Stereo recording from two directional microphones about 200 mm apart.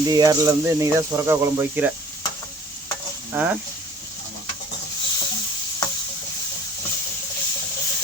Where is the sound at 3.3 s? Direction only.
5° right (ahead or behind).